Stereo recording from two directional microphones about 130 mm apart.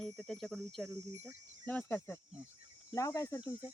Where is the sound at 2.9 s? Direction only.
25° left (ahead or behind).